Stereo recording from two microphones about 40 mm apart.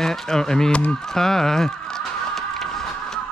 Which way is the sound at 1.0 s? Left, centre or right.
Centre.